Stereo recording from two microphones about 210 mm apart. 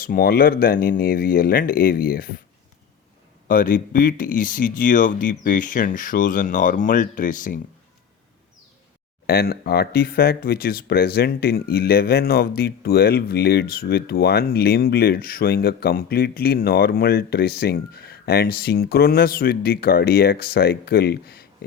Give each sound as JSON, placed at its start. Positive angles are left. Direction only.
{"t": 0.0, "sound": "speech", "side_deg": 45}
{"t": 3.4, "sound": "speech", "side_deg": 40}
{"t": 9.2, "sound": "speech", "side_deg": 50}